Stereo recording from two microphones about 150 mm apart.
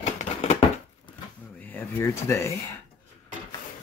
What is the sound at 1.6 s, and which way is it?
Speech, 15° left (ahead or behind).